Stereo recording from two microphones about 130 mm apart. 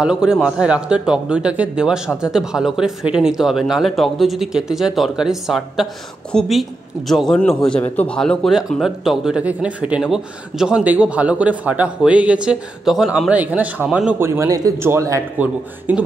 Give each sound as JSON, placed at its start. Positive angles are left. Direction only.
{"t": 0.0, "sound": "speech", "side_deg": -5}
{"t": 14.2, "sound": "speech", "side_deg": -20}
{"t": 15.3, "sound": "speech", "side_deg": -10}